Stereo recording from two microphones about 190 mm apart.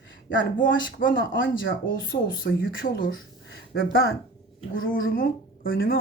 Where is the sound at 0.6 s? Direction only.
80° left.